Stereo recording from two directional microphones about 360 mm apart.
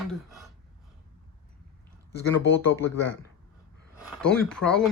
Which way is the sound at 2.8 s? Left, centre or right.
Left.